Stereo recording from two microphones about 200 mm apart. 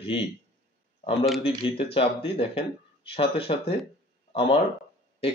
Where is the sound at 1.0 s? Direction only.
30° left (ahead or behind).